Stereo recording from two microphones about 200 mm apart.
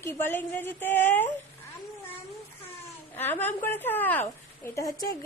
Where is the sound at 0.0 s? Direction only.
10° left (ahead or behind).